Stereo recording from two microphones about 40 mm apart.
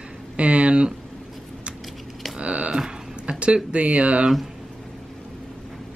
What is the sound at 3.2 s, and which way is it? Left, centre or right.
Speech, right.